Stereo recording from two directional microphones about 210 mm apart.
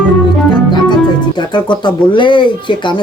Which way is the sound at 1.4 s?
20° left (ahead or behind).